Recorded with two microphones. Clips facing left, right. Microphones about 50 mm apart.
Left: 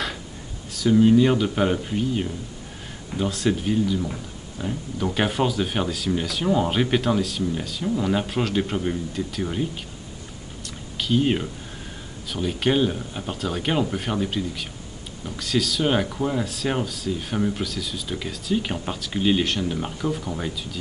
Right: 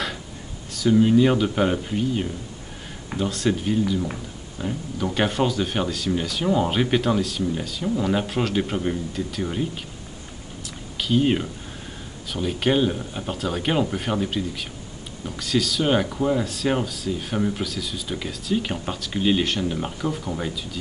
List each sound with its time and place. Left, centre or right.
0.7 s speech: centre
10.6 s a sound: centre
12.3 s speech: centre